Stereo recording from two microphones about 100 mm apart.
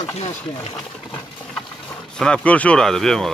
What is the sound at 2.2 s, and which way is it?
Speech, 10° left (ahead or behind).